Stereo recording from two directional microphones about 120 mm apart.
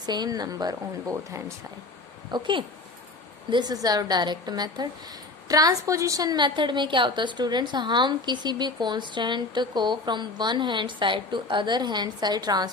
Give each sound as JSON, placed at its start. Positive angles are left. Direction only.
{"t": 0.0, "sound": "a woman's voice", "side_deg": -35}
{"t": 2.3, "sound": "a woman's voice", "side_deg": -45}